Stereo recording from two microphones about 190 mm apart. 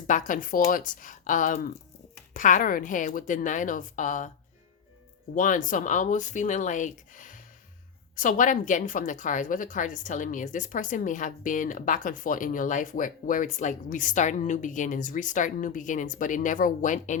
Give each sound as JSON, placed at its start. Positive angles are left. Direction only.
{"t": 0.1, "sound": "a woman's voice", "side_deg": 45}
{"t": 5.3, "sound": "a woman's voice", "side_deg": 45}